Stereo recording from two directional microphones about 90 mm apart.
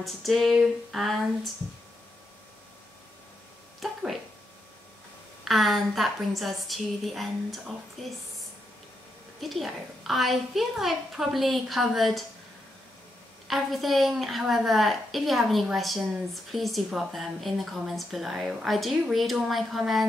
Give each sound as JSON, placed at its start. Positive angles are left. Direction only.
{"t": 0.0, "sound": "speech", "side_deg": 0}
{"t": 3.8, "sound": "speech", "side_deg": 0}
{"t": 5.4, "sound": "speech", "side_deg": 0}
{"t": 9.4, "sound": "speech", "side_deg": 0}
{"t": 13.5, "sound": "speech", "side_deg": 0}